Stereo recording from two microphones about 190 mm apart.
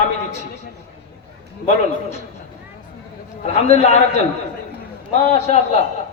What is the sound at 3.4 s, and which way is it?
Speech, 35° left (ahead or behind).